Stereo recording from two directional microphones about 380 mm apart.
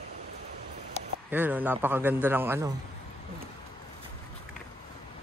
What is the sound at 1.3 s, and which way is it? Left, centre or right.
A man's voice, centre.